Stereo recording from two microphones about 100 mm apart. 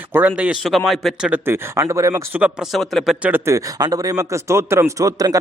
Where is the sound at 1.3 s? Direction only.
25° right (ahead or behind).